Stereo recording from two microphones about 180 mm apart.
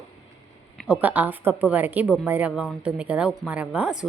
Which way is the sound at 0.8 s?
10° right (ahead or behind).